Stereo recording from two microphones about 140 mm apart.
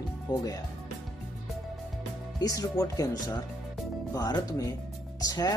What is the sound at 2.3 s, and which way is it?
Speech, 25° left (ahead or behind).